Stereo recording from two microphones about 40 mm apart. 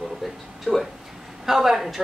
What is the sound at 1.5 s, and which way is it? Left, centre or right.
Speech, centre.